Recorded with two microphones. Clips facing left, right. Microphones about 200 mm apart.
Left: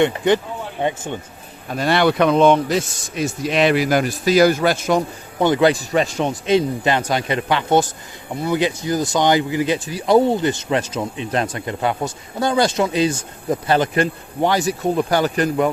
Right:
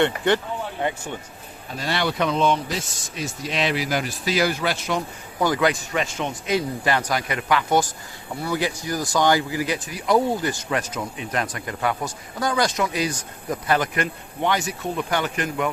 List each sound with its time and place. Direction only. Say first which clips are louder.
0.8 s speech: left 6 dB; 20° left (ahead or behind)
1.7 s speech: left 8 dB; 55° left (ahead or behind)
5.4 s speech: left 6 dB; 25° left (ahead or behind)